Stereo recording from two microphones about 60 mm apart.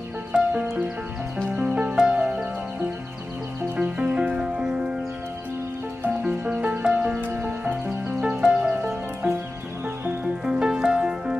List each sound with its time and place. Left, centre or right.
0.3 s music: right
3.7 s music: centre
6.4 s music: right
7.4 s music: right
8.2 s music: centre
10.2 s music: centre